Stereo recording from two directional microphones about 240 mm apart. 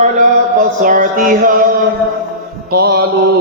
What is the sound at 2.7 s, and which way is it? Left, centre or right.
Speech, right.